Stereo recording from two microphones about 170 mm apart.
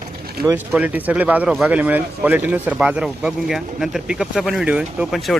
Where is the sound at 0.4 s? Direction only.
15° right (ahead or behind).